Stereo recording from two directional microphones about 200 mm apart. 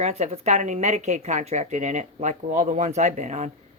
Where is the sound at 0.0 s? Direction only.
35° right (ahead or behind).